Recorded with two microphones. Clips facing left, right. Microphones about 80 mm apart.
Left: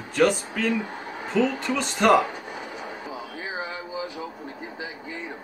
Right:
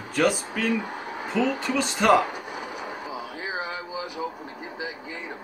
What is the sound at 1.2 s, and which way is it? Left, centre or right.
Speech, centre.